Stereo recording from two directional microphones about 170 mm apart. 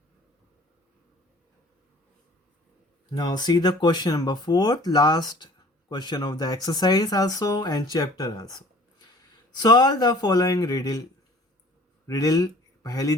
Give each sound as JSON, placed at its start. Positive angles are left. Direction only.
{"t": 3.1, "sound": "speech", "side_deg": 25}
{"t": 12.0, "sound": "speech", "side_deg": 20}